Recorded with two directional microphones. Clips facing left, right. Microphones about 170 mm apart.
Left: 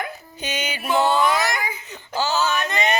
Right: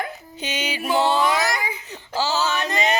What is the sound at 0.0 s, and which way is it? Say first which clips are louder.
Music: right 1 dB; 25° right (ahead or behind).